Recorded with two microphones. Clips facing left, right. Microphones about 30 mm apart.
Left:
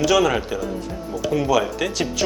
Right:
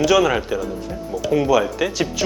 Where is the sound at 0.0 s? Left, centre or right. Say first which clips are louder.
Right 2 dB; centre.